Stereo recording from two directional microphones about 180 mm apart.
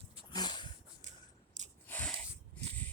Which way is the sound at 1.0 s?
45° right (ahead or behind).